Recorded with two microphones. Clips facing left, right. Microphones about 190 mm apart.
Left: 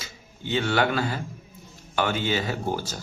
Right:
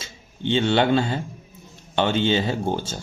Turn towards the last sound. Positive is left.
turn(degrees=-25)  # may be behind; listen again after turning